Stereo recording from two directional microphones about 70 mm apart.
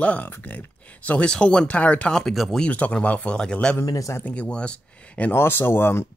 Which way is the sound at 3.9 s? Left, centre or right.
Left.